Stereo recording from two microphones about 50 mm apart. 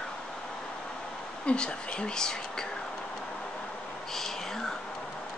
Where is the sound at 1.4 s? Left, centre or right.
Centre.